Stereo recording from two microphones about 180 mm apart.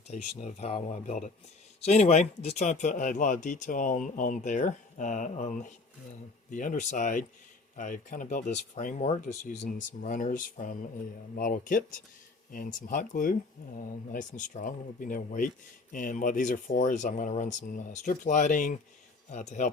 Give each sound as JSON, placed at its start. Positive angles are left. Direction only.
{"t": 0.1, "sound": "speech", "side_deg": 40}